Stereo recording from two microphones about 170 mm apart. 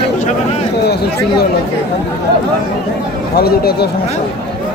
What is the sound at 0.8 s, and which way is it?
Speech, 70° left (ahead or behind).